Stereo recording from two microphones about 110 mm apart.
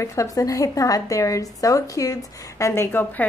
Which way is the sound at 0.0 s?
30° left (ahead or behind).